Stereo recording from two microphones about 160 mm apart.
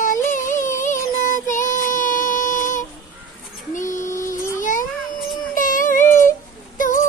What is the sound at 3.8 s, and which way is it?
Female singing, 50° left (ahead or behind).